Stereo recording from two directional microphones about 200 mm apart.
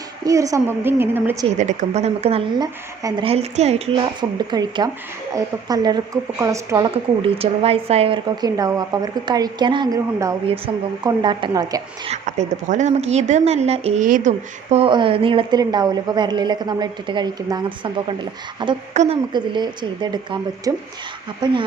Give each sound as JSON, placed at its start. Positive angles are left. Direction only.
{"t": 0.3, "sound": "a woman's voice", "side_deg": -15}
{"t": 1.5, "sound": "a woman's voice", "side_deg": -35}
{"t": 12.1, "sound": "a woman's voice", "side_deg": -35}